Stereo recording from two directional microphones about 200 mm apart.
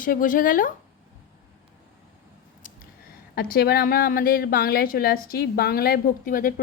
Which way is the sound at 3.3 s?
50° left (ahead or behind).